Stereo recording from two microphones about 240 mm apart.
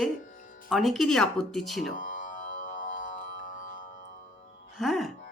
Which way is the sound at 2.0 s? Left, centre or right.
Left.